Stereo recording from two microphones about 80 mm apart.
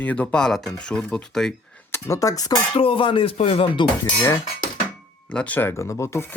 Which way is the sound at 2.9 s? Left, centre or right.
Left.